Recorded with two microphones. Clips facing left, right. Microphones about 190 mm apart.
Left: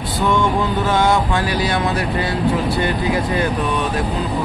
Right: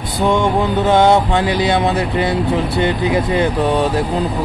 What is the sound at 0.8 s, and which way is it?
Speech, 20° right (ahead or behind).